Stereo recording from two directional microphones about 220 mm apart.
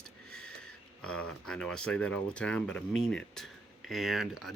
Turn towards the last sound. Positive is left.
turn(degrees=0)  # may be behind; listen again after turning